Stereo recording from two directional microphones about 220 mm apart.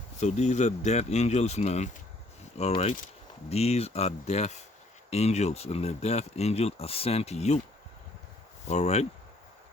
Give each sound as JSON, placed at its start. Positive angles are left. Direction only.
{"t": 0.2, "sound": "speech", "side_deg": 30}
{"t": 8.6, "sound": "speech", "side_deg": 30}